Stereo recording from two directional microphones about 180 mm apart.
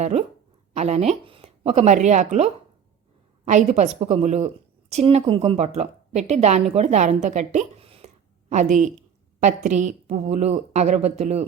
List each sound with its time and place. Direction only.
0.0 s a woman's voice: 35° right (ahead or behind)